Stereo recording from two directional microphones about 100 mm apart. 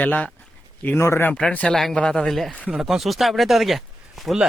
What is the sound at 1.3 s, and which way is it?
Speech, 10° left (ahead or behind).